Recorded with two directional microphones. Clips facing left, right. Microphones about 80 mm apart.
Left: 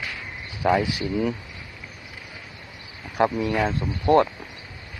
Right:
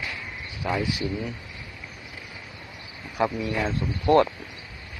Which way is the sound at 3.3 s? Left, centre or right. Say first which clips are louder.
Left 4 dB; left.